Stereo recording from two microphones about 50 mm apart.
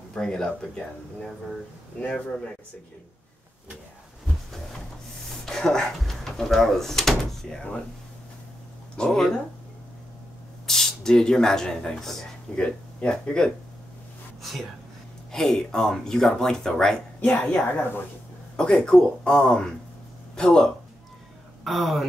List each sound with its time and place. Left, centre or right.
0.1 s speech: centre
5.4 s speech: centre
8.9 s speech: centre
10.7 s speech: centre
14.4 s speech: centre
17.2 s a woman's voice: left
18.6 s speech: centre
21.6 s speech: centre